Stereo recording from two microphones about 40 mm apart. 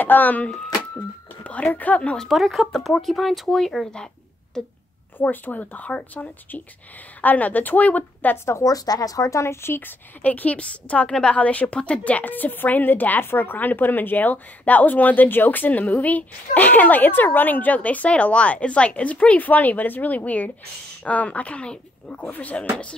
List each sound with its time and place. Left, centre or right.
0.0 s speech: left
2.1 s speech: centre
3.4 s speech: centre
5.2 s speech: left
9.6 s speech: left
10.2 s speech: left
12.3 s speech: left
13.3 s speech: left
19.3 s speech: left
22.2 s speech: left
22.6 s speech: left